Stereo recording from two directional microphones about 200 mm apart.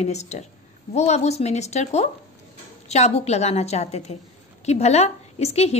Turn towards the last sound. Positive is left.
turn(degrees=30)  # may be behind; listen again after turning